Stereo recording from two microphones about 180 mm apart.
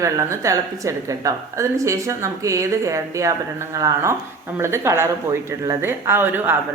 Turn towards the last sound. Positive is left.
turn(degrees=-10)  # may be behind; listen again after turning